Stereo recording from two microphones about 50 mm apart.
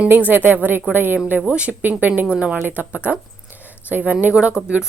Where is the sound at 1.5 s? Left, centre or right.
Right.